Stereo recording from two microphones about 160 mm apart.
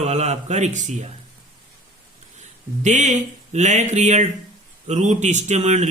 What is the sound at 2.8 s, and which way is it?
Speech, 45° right (ahead or behind).